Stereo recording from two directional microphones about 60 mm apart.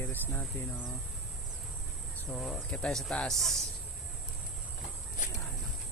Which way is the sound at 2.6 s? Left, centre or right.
Centre.